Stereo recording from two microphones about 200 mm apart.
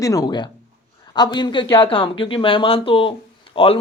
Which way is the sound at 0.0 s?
15° left (ahead or behind).